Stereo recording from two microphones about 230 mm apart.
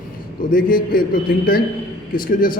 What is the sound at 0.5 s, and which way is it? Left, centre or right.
A man's voice, left.